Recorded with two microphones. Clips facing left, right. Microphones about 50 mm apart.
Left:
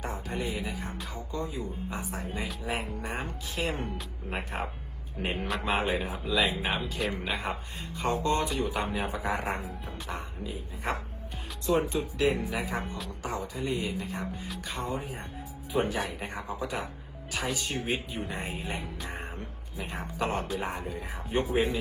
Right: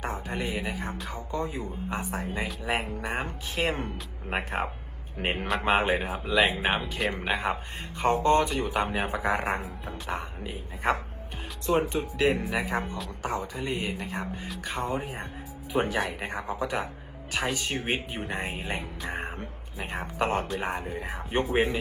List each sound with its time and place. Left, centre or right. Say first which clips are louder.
0.0 s a man's voice: right 2 dB; right
21.5 s speech: right 3 dB; right